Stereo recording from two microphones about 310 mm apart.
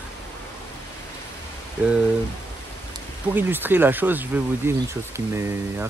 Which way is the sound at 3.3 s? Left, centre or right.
Centre.